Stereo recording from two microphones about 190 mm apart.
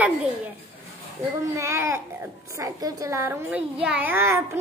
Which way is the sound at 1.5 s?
15° right (ahead or behind).